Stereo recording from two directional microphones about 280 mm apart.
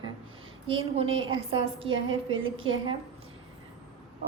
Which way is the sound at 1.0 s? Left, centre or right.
Right.